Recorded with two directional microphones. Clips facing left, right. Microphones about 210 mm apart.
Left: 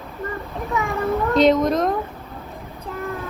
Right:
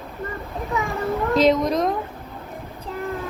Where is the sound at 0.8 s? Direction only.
Centre (ahead or behind).